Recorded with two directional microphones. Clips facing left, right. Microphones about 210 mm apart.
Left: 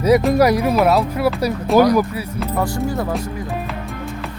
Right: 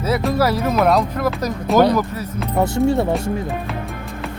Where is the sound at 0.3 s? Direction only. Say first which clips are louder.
Left 3 dB; 15° left (ahead or behind).